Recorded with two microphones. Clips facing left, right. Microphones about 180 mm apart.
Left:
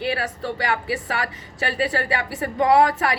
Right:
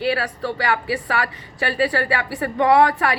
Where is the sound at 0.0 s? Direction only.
25° left (ahead or behind).